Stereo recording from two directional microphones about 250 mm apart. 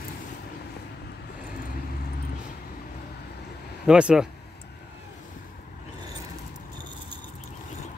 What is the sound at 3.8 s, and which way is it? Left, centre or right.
Speech, centre.